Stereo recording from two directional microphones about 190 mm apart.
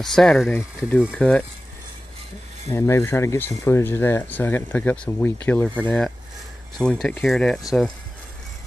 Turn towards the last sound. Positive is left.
turn(degrees=0)  # may be behind; listen again after turning